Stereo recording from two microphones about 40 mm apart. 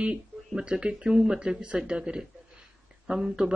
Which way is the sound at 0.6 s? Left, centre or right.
Right.